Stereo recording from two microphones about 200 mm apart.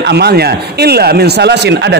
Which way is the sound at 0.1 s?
55° right (ahead or behind).